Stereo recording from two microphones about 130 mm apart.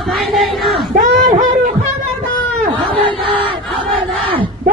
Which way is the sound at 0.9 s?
70° right (ahead or behind).